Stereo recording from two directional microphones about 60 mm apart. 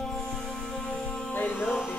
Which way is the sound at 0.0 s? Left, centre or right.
Centre.